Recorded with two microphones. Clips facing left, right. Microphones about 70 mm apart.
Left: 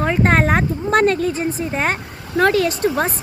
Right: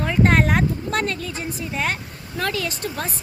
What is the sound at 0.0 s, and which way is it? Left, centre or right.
Speech, left.